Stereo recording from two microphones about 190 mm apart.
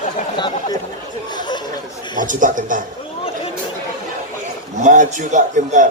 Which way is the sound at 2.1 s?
45° right (ahead or behind).